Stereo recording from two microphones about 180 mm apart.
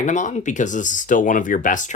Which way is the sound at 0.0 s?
45° left (ahead or behind).